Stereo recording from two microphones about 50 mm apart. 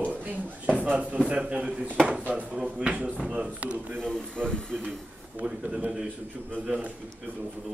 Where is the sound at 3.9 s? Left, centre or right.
Centre.